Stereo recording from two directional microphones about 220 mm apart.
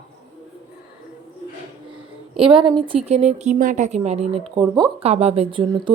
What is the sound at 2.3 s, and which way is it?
A woman's voice, 25° right (ahead or behind).